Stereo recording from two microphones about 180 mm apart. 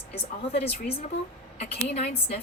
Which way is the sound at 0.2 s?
35° left (ahead or behind).